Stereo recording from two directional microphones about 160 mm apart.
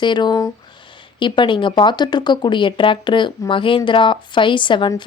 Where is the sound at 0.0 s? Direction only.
30° left (ahead or behind).